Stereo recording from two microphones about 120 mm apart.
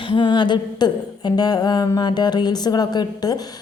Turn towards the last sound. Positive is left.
turn(degrees=35)  # may be behind; listen again after turning